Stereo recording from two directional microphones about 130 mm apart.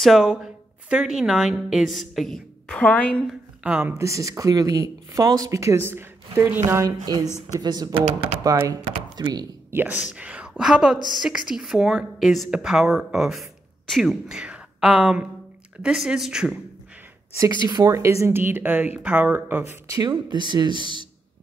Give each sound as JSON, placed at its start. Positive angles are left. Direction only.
{"t": 0.0, "sound": "a woman's voice", "side_deg": 0}
{"t": 3.3, "sound": "a woman's voice", "side_deg": -10}
{"t": 4.0, "sound": "speech", "side_deg": -25}
{"t": 7.6, "sound": "speech", "side_deg": -30}
{"t": 9.7, "sound": "a woman's voice", "side_deg": -15}
{"t": 17.6, "sound": "speech", "side_deg": -35}
{"t": 17.9, "sound": "speech", "side_deg": -20}
{"t": 19.7, "sound": "speech", "side_deg": -30}